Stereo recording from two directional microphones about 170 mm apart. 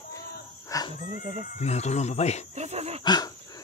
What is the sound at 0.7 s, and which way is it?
Dog, 20° left (ahead or behind).